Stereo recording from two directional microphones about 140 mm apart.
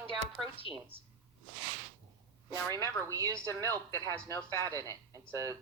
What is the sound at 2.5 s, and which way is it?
Speech, 25° right (ahead or behind).